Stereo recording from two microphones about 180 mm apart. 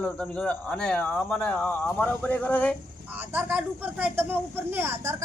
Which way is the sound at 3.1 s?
10° right (ahead or behind).